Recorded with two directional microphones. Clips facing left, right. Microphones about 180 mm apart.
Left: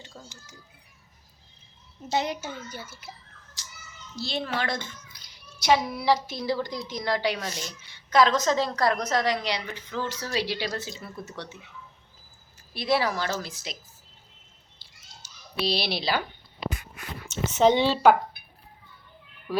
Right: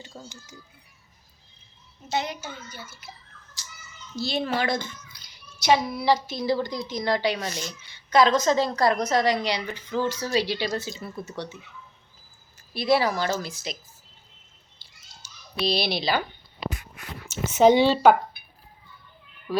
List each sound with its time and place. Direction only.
0.1 s a sound: 10° right (ahead or behind)
2.1 s a child's voice: 40° left (ahead or behind)
4.2 s speech: 10° right (ahead or behind)
5.6 s a woman's voice: 5° left (ahead or behind)
12.7 s a woman's voice: centre (ahead or behind)
14.8 s a sound: centre (ahead or behind)
15.6 s a woman's voice: 5° left (ahead or behind)
17.2 s speech: 10° right (ahead or behind)